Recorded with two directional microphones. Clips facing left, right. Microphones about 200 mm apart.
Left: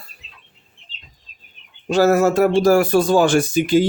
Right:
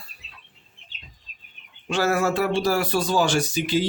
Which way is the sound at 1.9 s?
40° left (ahead or behind).